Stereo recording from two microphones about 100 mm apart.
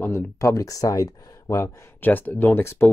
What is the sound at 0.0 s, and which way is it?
Speech, 25° left (ahead or behind).